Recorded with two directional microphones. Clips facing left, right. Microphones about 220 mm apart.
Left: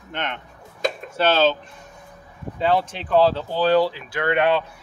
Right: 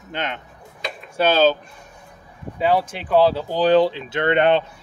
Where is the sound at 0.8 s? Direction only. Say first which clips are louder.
Left 7 dB; 45° left (ahead or behind).